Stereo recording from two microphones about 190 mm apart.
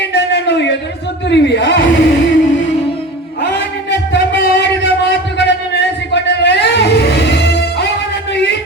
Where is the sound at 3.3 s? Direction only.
65° left (ahead or behind).